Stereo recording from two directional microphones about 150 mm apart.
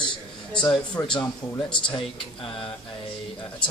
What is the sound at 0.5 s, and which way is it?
Speech, 10° left (ahead or behind).